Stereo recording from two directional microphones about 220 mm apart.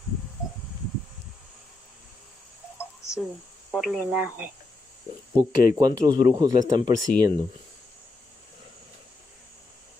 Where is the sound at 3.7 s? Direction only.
Centre (ahead or behind).